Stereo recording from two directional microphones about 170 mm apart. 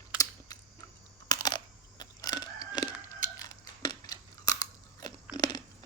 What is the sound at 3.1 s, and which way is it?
Scissors, 20° left (ahead or behind).